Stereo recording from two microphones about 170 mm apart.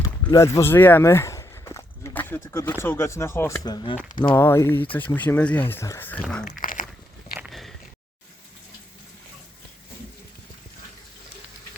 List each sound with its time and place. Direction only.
0.0 s speech: 20° left (ahead or behind)
4.4 s speech: 15° left (ahead or behind)
6.4 s dog: 55° left (ahead or behind)
7.3 s a sound: centre (ahead or behind)